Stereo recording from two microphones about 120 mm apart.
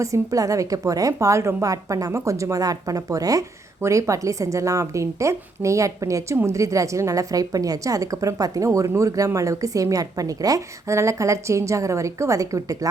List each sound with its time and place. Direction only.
0.0 s speech: 25° right (ahead or behind)